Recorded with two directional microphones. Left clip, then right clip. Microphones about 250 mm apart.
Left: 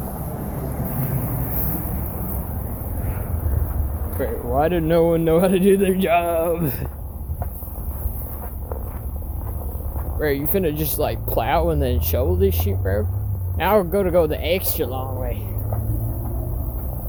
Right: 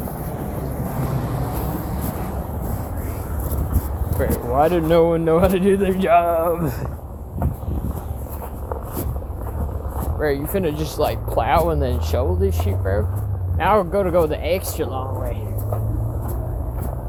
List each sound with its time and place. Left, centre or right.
4.2 s speech: centre
4.5 s speech: left
10.2 s speech: left